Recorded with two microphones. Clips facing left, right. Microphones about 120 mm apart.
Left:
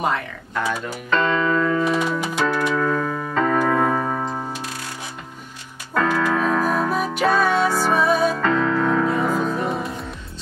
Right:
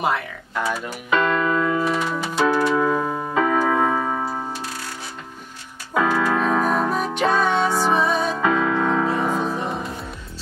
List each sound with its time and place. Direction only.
0.0 s speech: 5° right (ahead or behind)
2.1 s music: 15° left (ahead or behind)
2.7 s music: 15° right (ahead or behind)
3.3 s music: 10° right (ahead or behind)
5.9 s keyboard: 10° right (ahead or behind)
6.3 s music: centre (ahead or behind)
8.4 s music: 5° right (ahead or behind)